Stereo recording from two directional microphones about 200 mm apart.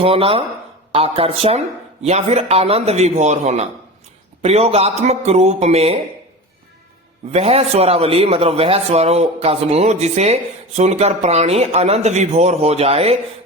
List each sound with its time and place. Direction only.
0.0 s a man's voice: 30° right (ahead or behind)
7.3 s a man's voice: 30° right (ahead or behind)